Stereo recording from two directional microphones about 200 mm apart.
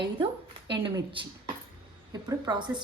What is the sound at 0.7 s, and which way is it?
A woman's voice, 25° right (ahead or behind).